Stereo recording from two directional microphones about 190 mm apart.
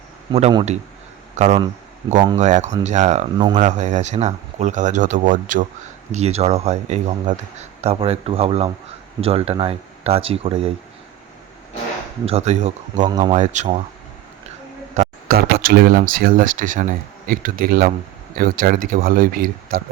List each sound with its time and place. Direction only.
0.3 s speech: 30° right (ahead or behind)
2.0 s speech: 20° right (ahead or behind)
2.4 s speech: 40° right (ahead or behind)
12.3 s speech: 35° right (ahead or behind)
13.1 s speech: 20° right (ahead or behind)
13.3 s speech: 40° right (ahead or behind)
15.0 s a sound: 35° right (ahead or behind)
15.3 s speech: 50° right (ahead or behind)